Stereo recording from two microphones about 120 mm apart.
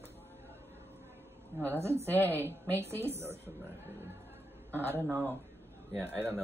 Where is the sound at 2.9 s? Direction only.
20° right (ahead or behind).